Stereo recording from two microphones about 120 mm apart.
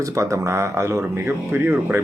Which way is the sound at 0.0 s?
25° right (ahead or behind).